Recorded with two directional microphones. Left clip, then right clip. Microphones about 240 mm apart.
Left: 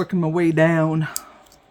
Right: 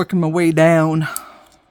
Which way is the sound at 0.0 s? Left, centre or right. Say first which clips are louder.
Right 3 dB; right.